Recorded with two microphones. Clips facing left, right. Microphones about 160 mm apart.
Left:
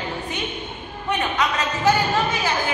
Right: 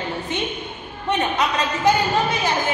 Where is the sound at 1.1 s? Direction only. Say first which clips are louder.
Right 2 dB; 20° right (ahead or behind).